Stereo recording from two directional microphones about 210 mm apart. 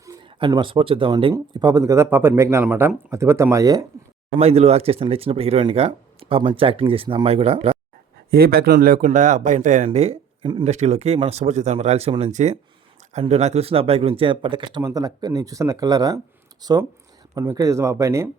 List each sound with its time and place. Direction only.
0.0 s speech: 20° right (ahead or behind)
4.4 s speech: 30° right (ahead or behind)
8.3 s speech: 45° right (ahead or behind); by 18.3 s 15° right (ahead or behind)